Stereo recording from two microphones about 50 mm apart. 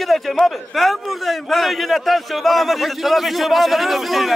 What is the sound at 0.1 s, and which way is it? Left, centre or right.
A man's voice, centre.